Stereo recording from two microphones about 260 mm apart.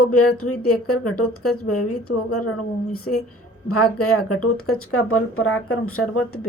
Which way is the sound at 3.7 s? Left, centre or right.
Left.